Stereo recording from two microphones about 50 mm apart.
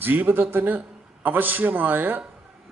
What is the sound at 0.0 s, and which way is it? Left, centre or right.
A man's voice, right.